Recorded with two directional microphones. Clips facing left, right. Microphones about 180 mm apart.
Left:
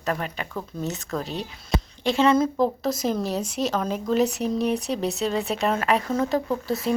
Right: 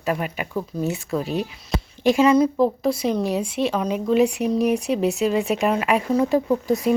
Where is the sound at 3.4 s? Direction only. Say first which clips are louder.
Right 3 dB; 40° left (ahead or behind).